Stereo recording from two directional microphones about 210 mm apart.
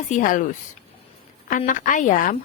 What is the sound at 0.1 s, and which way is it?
Speech, 40° left (ahead or behind).